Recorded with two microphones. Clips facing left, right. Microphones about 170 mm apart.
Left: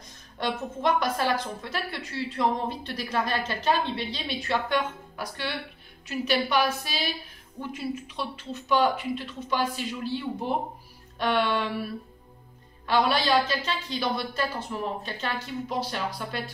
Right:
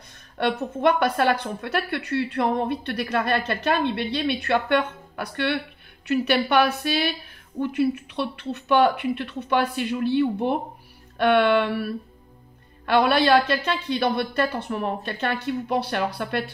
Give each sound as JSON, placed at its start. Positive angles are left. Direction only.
{"t": 0.4, "sound": "a woman's voice", "side_deg": -60}